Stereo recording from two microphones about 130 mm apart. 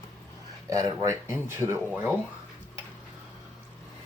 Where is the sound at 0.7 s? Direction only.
30° right (ahead or behind).